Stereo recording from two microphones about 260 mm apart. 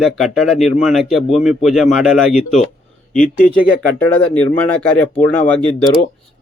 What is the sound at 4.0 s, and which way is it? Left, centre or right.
Speech, centre.